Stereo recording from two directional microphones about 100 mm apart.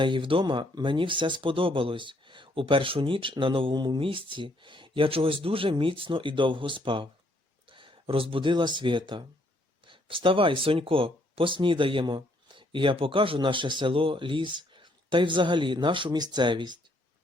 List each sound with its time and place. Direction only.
0.0 s speech: 55° right (ahead or behind)